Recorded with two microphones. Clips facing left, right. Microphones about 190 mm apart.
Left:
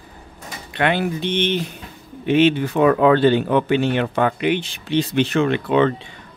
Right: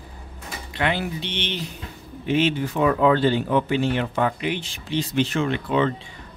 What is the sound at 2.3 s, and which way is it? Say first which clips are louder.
Speech: left 6 dB; 65° left (ahead or behind).